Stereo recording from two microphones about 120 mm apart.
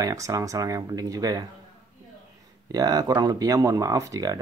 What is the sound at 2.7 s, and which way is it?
Speech, 30° right (ahead or behind).